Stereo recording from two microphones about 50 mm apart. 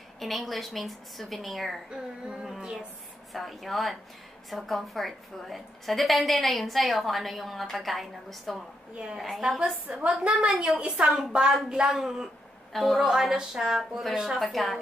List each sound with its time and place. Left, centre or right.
0.2 s a woman's voice: centre
1.9 s speech: centre
3.3 s a woman's voice: centre
8.9 s a woman's voice: centre
10.5 s a woman's voice: centre
10.8 s speech: centre
14.4 s a woman's voice: centre